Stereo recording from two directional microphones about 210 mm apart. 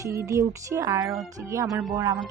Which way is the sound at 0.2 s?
15° right (ahead or behind).